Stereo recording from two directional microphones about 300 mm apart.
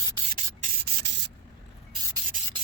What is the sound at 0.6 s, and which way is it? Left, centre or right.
Rub, right.